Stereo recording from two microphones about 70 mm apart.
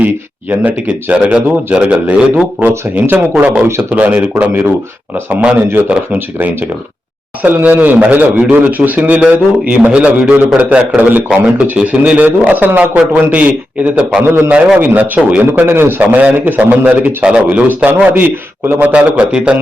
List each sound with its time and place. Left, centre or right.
0.0 s a man's voice: right
5.8 s a man's voice: right
14.3 s a man's voice: right
15.5 s a man's voice: right
18.9 s a man's voice: centre